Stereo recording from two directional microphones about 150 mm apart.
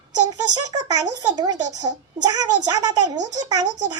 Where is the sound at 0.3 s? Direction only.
25° right (ahead or behind).